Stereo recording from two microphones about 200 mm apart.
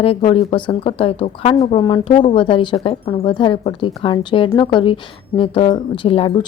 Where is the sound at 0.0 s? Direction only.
30° left (ahead or behind).